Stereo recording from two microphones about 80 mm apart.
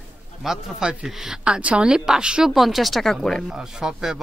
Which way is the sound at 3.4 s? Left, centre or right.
Centre.